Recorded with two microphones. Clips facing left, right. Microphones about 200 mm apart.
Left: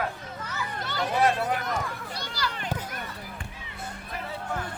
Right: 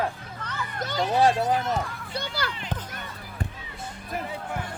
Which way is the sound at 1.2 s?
30° right (ahead or behind).